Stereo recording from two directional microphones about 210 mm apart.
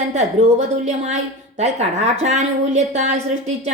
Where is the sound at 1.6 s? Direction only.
30° right (ahead or behind).